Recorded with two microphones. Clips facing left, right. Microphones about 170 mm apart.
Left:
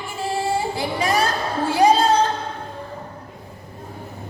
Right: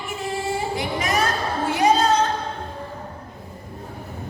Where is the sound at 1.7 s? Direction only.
30° left (ahead or behind).